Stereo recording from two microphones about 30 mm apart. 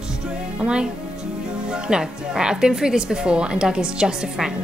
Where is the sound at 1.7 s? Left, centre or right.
Right.